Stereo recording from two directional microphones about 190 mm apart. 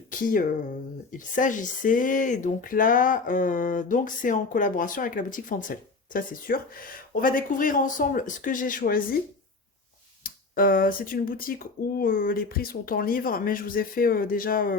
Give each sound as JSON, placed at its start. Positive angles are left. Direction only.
{"t": 0.1, "sound": "speech", "side_deg": 45}
{"t": 10.2, "sound": "speech", "side_deg": 50}